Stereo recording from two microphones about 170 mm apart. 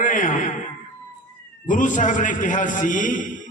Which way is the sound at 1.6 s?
50° left (ahead or behind).